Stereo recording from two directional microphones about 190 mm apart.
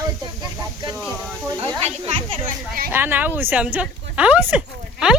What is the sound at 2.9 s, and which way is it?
Speech, 10° right (ahead or behind).